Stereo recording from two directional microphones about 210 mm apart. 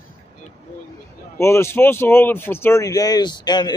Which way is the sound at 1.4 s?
10° left (ahead or behind).